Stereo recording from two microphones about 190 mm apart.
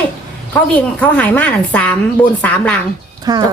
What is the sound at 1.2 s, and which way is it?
Speech, 5° left (ahead or behind).